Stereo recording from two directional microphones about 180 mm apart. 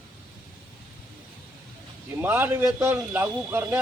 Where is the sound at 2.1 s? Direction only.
10° right (ahead or behind).